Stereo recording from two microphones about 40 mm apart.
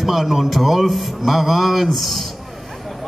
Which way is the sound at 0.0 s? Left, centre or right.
Centre.